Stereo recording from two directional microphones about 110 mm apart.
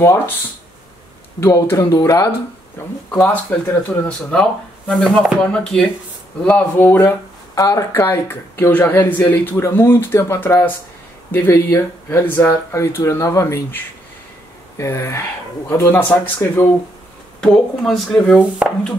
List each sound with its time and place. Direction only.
1.4 s speech: 25° left (ahead or behind)
2.8 s speech: 20° left (ahead or behind)
7.5 s speech: 30° left (ahead or behind)
14.8 s speech: 25° left (ahead or behind)
17.4 s speech: 5° left (ahead or behind)
18.6 s music: 15° right (ahead or behind)